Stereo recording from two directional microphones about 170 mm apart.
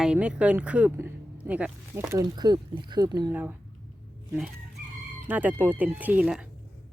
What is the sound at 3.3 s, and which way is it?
Speech, 10° right (ahead or behind).